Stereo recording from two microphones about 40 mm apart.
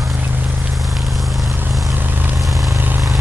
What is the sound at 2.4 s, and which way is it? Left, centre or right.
Vehicle, centre.